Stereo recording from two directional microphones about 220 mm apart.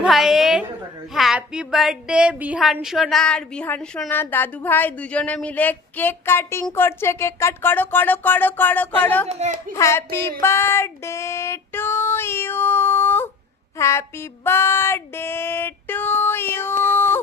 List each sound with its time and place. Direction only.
0.0 s a sound: centre (ahead or behind)
1.1 s speech: centre (ahead or behind)
9.3 s a woman's voice: 35° right (ahead or behind)
9.7 s speech: 10° left (ahead or behind)